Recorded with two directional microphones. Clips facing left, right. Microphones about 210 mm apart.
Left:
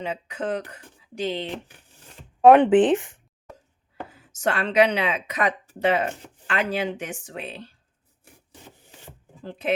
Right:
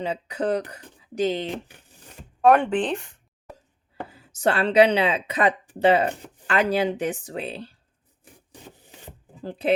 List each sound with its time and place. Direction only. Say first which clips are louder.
0.0 s speech: right 3 dB; 35° right (ahead or behind)
2.4 s speech: left 5 dB; 20° left (ahead or behind)
4.1 s speech: right 3 dB; 30° right (ahead or behind)
9.4 s speech: right 3 dB; 35° right (ahead or behind)